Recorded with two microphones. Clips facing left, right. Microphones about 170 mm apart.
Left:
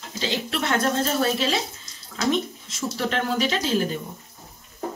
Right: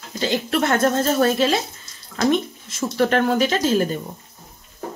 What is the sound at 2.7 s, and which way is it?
Speech, 55° right (ahead or behind).